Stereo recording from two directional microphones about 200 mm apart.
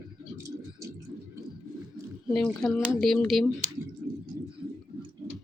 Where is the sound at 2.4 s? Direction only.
5° left (ahead or behind).